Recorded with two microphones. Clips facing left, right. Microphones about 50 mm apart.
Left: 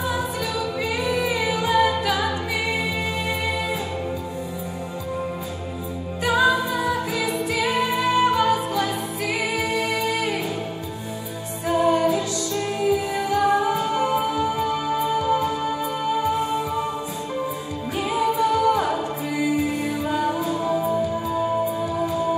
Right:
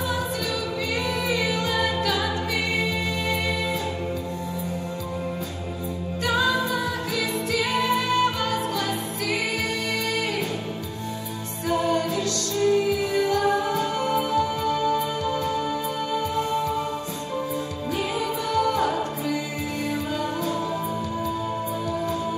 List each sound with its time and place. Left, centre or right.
1.0 s singing: centre
6.2 s music: centre
11.6 s music: centre
18.1 s music: centre
20.1 s music: centre
21.9 s music: centre